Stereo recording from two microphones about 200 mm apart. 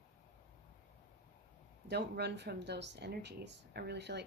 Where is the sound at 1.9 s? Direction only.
55° right (ahead or behind).